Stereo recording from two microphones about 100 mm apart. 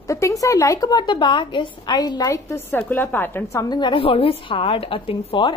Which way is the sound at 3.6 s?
45° left (ahead or behind).